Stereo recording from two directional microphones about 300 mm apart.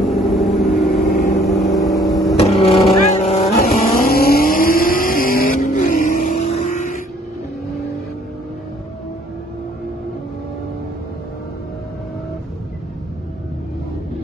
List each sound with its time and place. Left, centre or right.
0.0 s vehicle: centre
1.0 s vehicle: left
1.4 s vehicle: centre
2.3 s a sound: left
3.2 s vehicle: left